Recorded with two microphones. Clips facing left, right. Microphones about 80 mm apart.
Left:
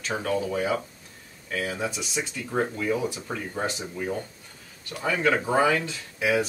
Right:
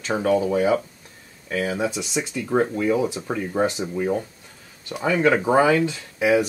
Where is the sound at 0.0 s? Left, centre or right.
Right.